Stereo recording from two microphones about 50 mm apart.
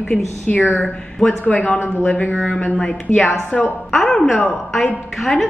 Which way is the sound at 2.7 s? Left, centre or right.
Centre.